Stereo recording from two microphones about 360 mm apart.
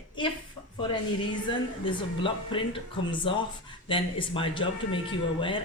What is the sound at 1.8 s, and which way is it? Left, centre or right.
A woman's voice, centre.